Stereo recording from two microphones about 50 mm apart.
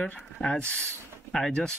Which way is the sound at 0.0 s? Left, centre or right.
Left.